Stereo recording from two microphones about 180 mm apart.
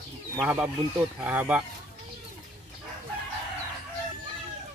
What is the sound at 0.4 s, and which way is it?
Speech, 10° right (ahead or behind).